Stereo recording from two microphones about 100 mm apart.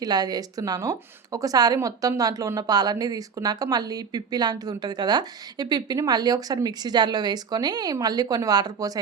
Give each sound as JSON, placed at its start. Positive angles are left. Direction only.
{"t": 0.0, "sound": "speech", "side_deg": -40}